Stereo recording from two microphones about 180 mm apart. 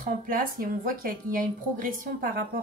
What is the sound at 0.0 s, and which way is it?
Speech, 50° right (ahead or behind).